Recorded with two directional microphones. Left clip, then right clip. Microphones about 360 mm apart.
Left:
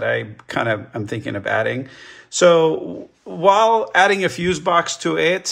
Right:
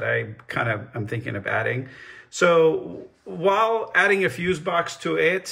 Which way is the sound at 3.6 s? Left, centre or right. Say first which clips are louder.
Left 5 dB; left.